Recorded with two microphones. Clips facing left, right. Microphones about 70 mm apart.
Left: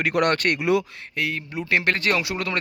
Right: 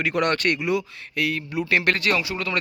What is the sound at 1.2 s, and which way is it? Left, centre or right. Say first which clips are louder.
Speech: right 2 dB; left.